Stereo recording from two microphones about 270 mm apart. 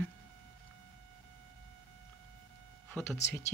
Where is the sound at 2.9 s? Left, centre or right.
Centre.